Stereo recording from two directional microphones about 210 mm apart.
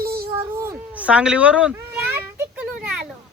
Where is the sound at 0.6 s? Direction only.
10° right (ahead or behind).